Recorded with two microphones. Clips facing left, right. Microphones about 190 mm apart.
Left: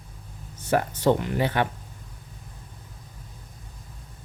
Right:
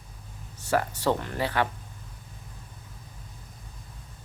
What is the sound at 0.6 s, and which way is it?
Speech, 20° left (ahead or behind).